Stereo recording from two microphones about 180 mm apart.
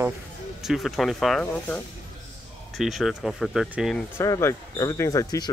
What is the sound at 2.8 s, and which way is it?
Speech, centre (ahead or behind).